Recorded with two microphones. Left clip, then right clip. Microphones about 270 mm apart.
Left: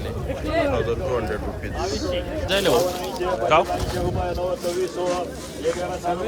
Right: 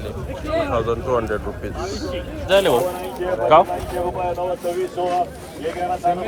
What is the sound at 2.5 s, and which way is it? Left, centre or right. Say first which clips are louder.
Speech: right 5 dB; centre.